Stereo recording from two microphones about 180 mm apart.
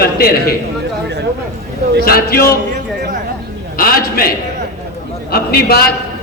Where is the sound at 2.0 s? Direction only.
55° left (ahead or behind).